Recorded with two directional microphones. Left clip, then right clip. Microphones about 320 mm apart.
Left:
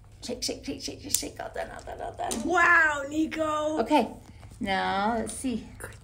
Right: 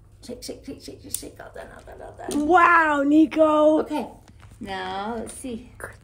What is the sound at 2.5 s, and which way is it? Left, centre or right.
Speech, right.